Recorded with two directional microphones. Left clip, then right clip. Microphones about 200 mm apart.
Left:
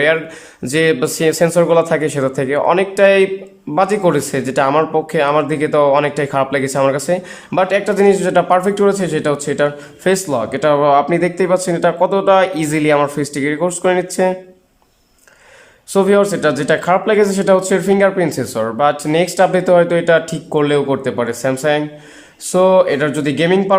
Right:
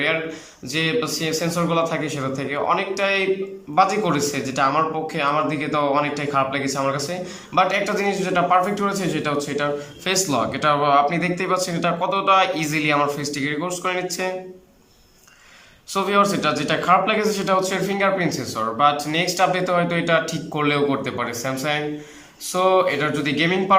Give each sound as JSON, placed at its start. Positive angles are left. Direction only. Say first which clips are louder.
{"t": 0.0, "sound": "a man's voice", "louder": "left 8 dB", "side_deg": 45}
{"t": 15.9, "sound": "speech", "louder": "left 6 dB", "side_deg": 35}